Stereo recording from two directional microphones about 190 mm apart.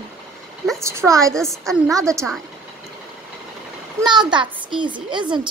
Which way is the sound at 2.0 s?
15° right (ahead or behind).